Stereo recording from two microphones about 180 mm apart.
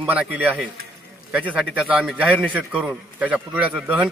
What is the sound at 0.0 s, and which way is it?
A man's voice, 10° right (ahead or behind).